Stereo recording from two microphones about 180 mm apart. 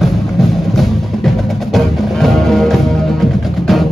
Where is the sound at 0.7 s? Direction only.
Centre (ahead or behind).